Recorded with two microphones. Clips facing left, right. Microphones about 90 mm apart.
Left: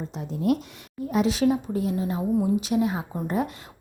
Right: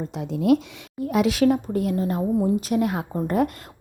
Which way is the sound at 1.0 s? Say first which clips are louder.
Right 3 dB; 75° right (ahead or behind).